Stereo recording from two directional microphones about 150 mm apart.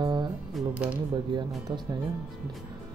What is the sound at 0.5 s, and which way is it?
Speech, 10° right (ahead or behind).